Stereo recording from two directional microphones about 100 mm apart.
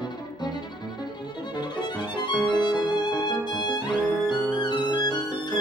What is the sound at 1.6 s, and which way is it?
Violin, 45° left (ahead or behind).